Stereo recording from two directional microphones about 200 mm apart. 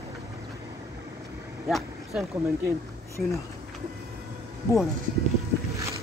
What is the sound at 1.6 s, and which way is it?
Vehicle, centre (ahead or behind).